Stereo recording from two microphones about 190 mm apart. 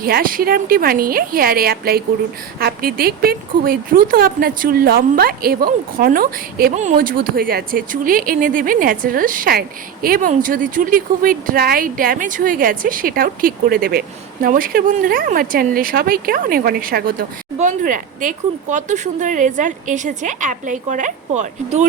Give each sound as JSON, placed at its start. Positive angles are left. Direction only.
{"t": 0.0, "sound": "speech", "side_deg": -50}